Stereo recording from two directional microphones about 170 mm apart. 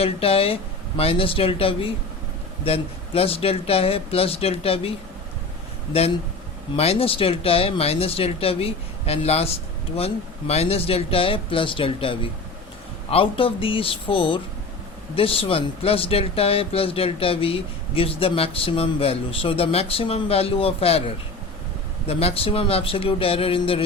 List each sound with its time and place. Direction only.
0.0 s speech: 35° left (ahead or behind)
6.7 s speech: 35° left (ahead or behind)